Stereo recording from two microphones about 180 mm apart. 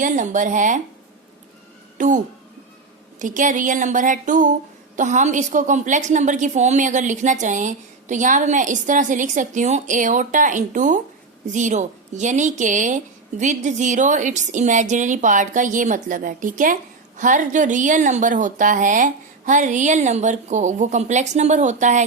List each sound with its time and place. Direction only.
0.0 s a woman's voice: 45° right (ahead or behind)
2.0 s a woman's voice: 45° right (ahead or behind)